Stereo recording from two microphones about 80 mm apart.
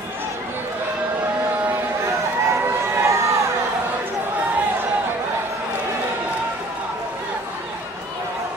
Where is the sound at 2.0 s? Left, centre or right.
Right.